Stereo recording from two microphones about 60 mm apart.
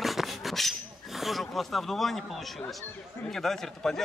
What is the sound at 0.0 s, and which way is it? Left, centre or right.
Speech, centre.